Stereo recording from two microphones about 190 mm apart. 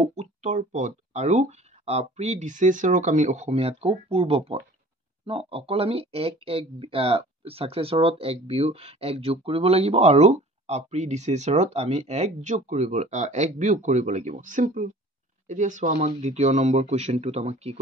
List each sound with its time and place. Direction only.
0.0 s speech: 35° right (ahead or behind)